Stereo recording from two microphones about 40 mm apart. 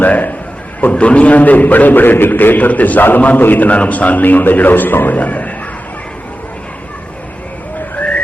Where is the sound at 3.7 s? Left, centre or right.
Left.